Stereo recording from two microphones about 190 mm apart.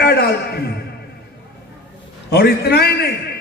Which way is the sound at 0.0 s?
55° left (ahead or behind).